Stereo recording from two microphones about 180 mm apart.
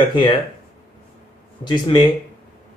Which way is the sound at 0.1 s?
30° left (ahead or behind).